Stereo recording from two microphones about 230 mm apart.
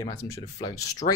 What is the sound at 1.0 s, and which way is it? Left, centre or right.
Speech, left.